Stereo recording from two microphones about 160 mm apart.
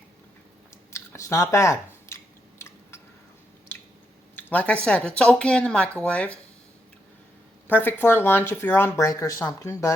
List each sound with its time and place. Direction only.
0.9 s speech: 15° left (ahead or behind)
2.0 s chewing: 15° left (ahead or behind)
4.4 s speech: 10° left (ahead or behind)
7.7 s speech: 10° left (ahead or behind)